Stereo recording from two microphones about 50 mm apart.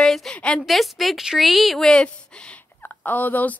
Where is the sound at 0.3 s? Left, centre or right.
Left.